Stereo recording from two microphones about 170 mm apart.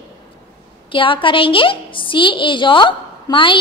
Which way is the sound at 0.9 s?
30° left (ahead or behind).